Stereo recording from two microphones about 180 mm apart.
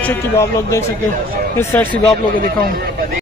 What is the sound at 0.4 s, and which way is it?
A man's voice, 15° left (ahead or behind).